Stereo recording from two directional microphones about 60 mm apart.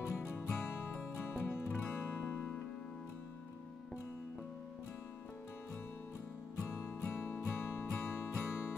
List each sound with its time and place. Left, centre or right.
0.3 s music: left
6.8 s music: left